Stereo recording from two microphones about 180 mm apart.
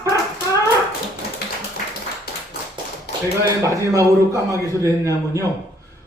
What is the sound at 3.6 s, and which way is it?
A man's voice, 15° right (ahead or behind).